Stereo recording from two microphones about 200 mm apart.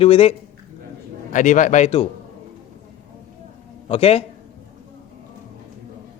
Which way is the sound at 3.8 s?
30° left (ahead or behind).